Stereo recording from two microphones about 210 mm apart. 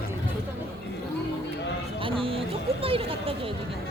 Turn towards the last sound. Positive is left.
turn(degrees=-25)  # may be behind; listen again after turning